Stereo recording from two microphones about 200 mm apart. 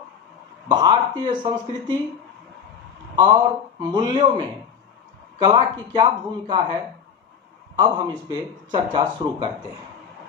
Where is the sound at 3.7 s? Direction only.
20° right (ahead or behind).